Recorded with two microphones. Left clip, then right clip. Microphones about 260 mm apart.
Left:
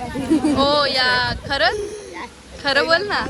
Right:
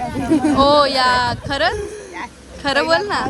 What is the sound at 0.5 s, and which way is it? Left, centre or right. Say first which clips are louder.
A woman's voice: right 6 dB; centre.